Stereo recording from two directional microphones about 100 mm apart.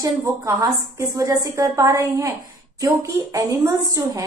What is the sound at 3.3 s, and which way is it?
Speech, 35° right (ahead or behind).